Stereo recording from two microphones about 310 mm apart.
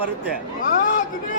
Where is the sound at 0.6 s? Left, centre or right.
Left.